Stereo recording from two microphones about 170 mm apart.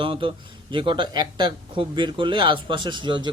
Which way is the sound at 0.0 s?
30° right (ahead or behind).